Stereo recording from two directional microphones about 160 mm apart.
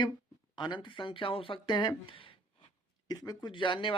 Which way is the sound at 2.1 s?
35° left (ahead or behind).